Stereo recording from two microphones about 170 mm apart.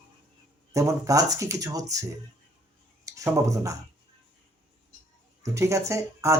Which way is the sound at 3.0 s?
20° right (ahead or behind).